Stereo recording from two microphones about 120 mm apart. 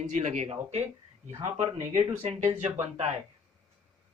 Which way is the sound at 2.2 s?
70° right (ahead or behind).